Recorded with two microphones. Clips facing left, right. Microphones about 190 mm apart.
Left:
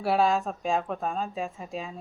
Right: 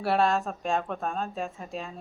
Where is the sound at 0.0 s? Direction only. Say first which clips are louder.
Left 1 dB; centre (ahead or behind).